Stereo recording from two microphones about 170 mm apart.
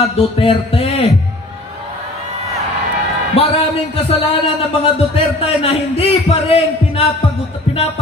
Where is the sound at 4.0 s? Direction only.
35° left (ahead or behind).